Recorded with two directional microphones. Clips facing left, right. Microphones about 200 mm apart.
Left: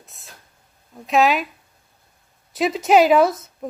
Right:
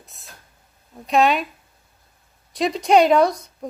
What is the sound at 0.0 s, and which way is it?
A woman's voice, centre (ahead or behind).